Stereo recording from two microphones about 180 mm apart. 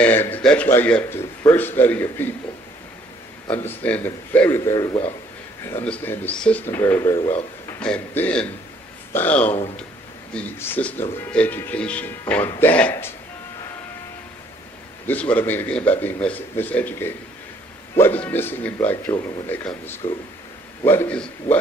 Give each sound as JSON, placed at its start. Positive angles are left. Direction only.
{"t": 0.0, "sound": "speech", "side_deg": 10}
{"t": 3.4, "sound": "speech", "side_deg": 10}
{"t": 5.7, "sound": "speech", "side_deg": 10}
{"t": 7.8, "sound": "a man's voice", "side_deg": 10}
{"t": 15.0, "sound": "speech", "side_deg": 10}
{"t": 19.1, "sound": "speech", "side_deg": 25}
{"t": 19.4, "sound": "speech", "side_deg": 10}